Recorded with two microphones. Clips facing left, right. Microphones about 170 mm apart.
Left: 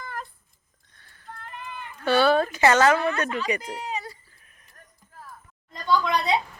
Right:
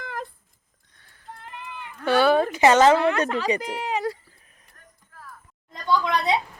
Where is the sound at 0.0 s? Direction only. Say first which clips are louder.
Right 3 dB; 90° right.